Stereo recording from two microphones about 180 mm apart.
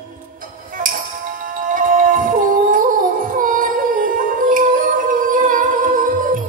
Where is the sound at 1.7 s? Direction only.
50° right (ahead or behind).